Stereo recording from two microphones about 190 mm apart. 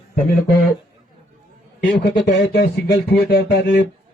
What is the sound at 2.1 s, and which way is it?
Speech, 65° left (ahead or behind).